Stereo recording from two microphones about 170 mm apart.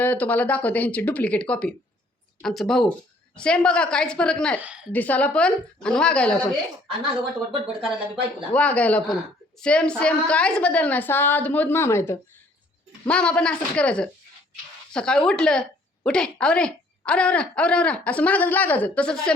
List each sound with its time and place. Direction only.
0.0 s a woman's voice: 10° left (ahead or behind)
4.6 s a woman's voice: 5° right (ahead or behind)
4.9 s a woman's voice: 10° left (ahead or behind)
8.1 s a woman's voice: 5° left (ahead or behind)